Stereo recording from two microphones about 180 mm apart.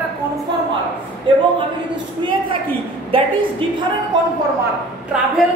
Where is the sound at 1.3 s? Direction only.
30° right (ahead or behind).